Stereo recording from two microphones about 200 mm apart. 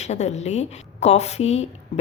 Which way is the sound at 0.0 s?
35° left (ahead or behind).